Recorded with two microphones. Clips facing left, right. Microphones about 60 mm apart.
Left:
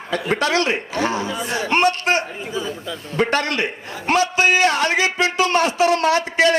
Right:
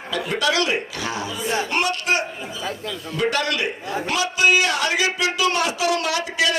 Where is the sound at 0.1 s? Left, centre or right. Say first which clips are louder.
Left 2 dB; left.